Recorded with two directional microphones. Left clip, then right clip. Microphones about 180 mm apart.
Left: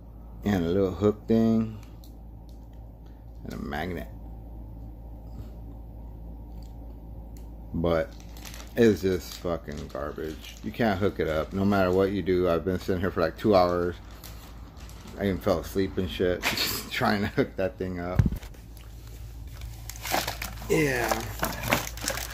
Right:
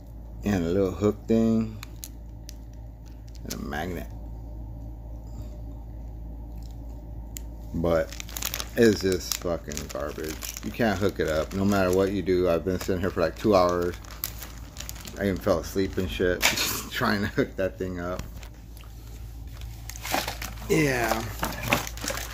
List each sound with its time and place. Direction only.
0.4 s speech: centre (ahead or behind)
3.5 s a sound: centre (ahead or behind)
7.8 s speech: centre (ahead or behind)
15.1 s speech: centre (ahead or behind)
19.9 s slosh: 15° right (ahead or behind)
20.8 s a sound: 10° right (ahead or behind)